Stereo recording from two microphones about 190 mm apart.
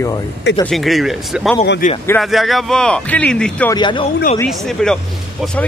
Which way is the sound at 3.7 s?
25° left (ahead or behind).